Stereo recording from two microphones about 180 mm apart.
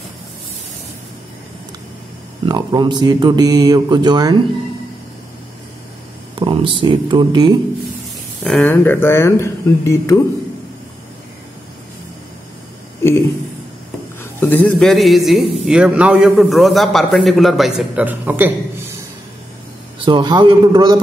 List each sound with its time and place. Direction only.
2.4 s speech: 20° right (ahead or behind)
6.4 s speech: 25° right (ahead or behind)
8.5 s speech: 5° left (ahead or behind)
14.2 s a man's voice: 10° left (ahead or behind); by 18.5 s 10° right (ahead or behind)
20.0 s speech: 25° right (ahead or behind)